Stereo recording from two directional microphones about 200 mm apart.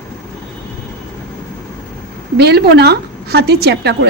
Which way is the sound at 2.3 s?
55° right (ahead or behind).